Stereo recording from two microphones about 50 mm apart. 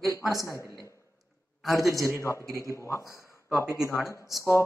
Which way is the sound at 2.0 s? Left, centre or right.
Left.